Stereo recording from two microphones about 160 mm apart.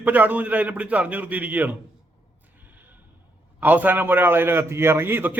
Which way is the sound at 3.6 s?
10° right (ahead or behind).